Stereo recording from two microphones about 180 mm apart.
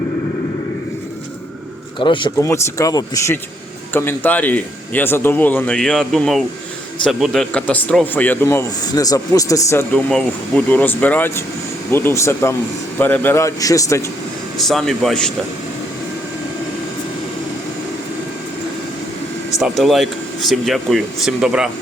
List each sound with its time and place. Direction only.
2.0 s speech: 25° left (ahead or behind)
14.7 s speech: centre (ahead or behind)
19.5 s speech: centre (ahead or behind)